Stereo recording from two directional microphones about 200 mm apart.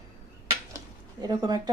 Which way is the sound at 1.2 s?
20° right (ahead or behind).